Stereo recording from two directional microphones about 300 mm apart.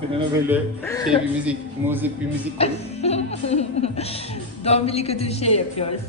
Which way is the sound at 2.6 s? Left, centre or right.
Left.